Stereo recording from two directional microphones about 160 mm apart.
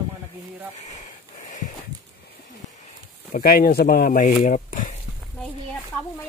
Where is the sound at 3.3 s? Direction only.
65° left (ahead or behind).